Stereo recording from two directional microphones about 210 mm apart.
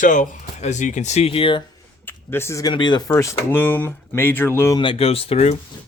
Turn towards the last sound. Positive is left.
turn(degrees=30)  # may be behind; listen again after turning